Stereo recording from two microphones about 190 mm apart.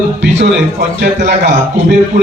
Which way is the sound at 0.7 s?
60° right (ahead or behind).